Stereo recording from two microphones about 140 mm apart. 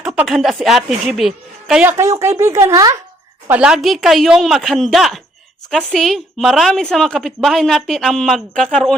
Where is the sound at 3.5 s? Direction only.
5° right (ahead or behind).